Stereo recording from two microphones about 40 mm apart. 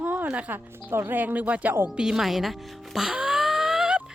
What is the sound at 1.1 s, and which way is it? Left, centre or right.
Speech, right.